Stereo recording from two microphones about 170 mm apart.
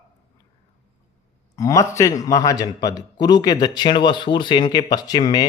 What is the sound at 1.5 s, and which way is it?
A man's voice, 20° left (ahead or behind).